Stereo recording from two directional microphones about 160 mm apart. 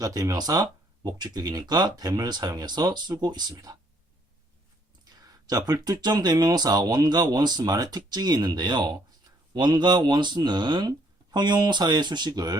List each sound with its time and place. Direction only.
0.0 s speech: 20° right (ahead or behind)
5.0 s speech: 25° right (ahead or behind)